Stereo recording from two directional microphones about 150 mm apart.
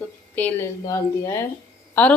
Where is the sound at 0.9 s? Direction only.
20° left (ahead or behind).